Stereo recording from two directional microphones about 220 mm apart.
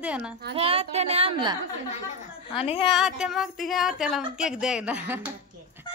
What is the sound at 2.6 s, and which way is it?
Speech, 25° left (ahead or behind).